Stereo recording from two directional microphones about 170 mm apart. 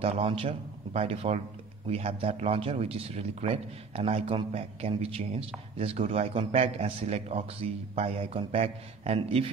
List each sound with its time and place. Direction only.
0.0 s a man's voice: 35° right (ahead or behind)